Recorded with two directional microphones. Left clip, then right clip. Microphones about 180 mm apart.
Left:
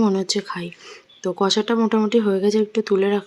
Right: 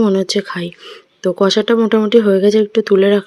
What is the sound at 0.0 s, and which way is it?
Speech, 20° right (ahead or behind).